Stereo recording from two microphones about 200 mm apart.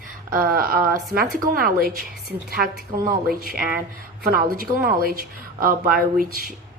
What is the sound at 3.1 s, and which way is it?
A woman's voice, 50° right (ahead or behind).